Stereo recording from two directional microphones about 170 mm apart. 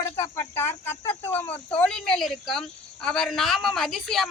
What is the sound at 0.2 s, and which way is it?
A man's voice, 15° left (ahead or behind).